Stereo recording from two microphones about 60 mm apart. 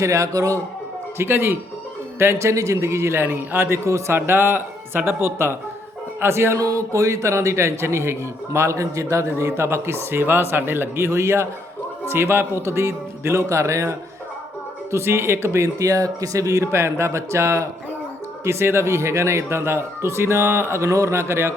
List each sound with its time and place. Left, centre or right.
0.0 s a man's voice: right
1.2 s a man's voice: right
6.6 s speech: right
15.8 s speech: right
16.7 s speech: right